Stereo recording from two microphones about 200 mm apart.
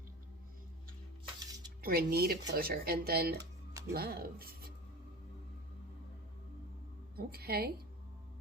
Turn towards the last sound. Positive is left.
turn(degrees=-50)  # may be behind; listen again after turning